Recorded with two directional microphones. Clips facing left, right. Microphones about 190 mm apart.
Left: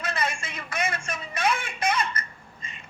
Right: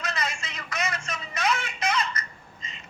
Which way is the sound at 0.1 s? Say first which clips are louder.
Left 3 dB; 55° left (ahead or behind).